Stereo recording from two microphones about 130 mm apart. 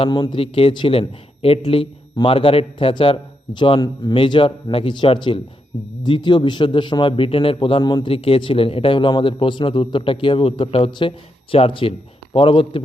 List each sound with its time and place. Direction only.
0.0 s a man's voice: 35° left (ahead or behind)